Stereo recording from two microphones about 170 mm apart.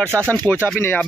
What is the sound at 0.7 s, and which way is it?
Speech, 10° left (ahead or behind).